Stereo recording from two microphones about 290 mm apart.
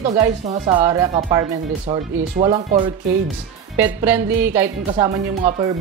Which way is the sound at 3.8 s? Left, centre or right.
Centre.